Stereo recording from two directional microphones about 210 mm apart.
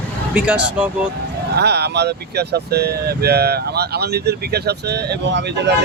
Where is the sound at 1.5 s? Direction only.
50° right (ahead or behind).